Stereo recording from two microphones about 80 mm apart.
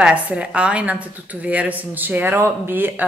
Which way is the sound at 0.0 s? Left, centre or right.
Centre.